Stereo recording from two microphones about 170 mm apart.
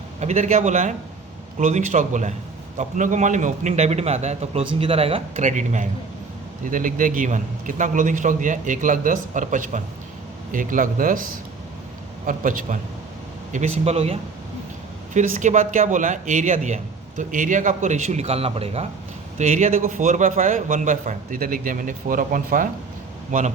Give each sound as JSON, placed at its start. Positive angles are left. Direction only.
{"t": 0.2, "sound": "a man's voice", "side_deg": -40}
{"t": 13.5, "sound": "a man's voice", "side_deg": -40}